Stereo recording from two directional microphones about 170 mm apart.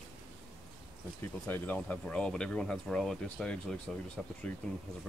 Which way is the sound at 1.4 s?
10° left (ahead or behind).